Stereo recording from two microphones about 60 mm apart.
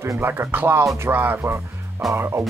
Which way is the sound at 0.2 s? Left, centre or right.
Right.